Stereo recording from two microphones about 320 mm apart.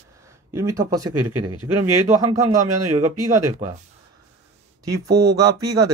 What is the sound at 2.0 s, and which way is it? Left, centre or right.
Speech, centre.